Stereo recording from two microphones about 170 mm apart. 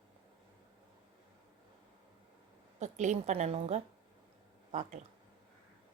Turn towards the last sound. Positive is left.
turn(degrees=-45)  # may be behind; listen again after turning